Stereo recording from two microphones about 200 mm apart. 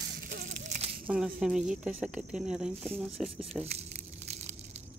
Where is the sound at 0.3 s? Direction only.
40° right (ahead or behind).